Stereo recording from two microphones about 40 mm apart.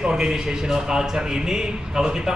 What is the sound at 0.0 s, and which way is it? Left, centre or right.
A man's voice, centre.